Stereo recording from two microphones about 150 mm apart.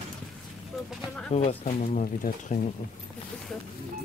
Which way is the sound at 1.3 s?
45° left (ahead or behind).